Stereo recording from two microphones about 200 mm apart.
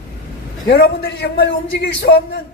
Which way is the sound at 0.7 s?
50° left (ahead or behind).